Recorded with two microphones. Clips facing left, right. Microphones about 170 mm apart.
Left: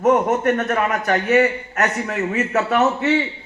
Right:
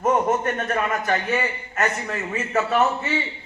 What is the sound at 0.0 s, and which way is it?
A man's voice, 70° left (ahead or behind).